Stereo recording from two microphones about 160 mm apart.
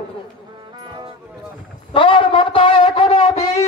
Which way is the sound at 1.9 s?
35° left (ahead or behind).